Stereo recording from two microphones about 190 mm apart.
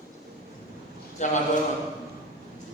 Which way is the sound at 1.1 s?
40° left (ahead or behind).